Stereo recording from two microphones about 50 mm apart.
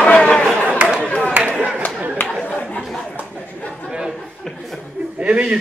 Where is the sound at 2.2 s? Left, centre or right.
Left.